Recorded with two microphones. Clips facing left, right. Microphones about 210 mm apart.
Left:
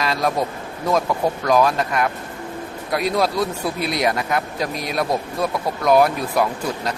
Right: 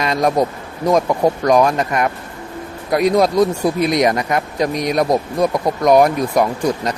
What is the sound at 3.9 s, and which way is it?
Speech, centre (ahead or behind).